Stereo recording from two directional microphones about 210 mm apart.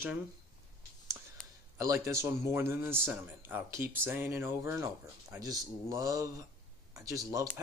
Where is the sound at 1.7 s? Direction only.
15° right (ahead or behind).